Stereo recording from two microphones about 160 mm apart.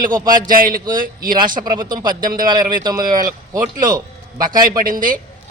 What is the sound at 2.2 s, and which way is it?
Speech, 65° right (ahead or behind).